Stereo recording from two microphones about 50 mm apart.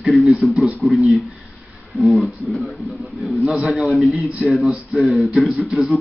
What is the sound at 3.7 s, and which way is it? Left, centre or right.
A man's voice, centre.